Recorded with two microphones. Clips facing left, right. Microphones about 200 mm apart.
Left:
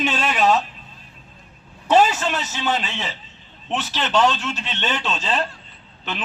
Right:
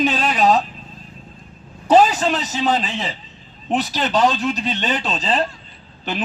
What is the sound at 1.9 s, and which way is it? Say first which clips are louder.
A man's voice: right 3 dB; 35° right (ahead or behind).